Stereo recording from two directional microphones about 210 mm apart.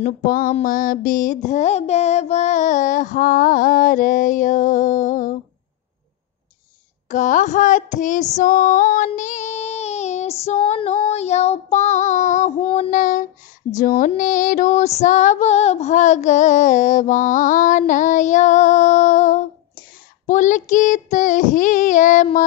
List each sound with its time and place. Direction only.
0.0 s a sound: 40° left (ahead or behind)
0.6 s music: 40° left (ahead or behind)
7.1 s music: 35° left (ahead or behind)